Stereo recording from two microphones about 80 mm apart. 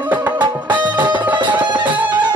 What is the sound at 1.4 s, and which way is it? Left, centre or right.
Music, right.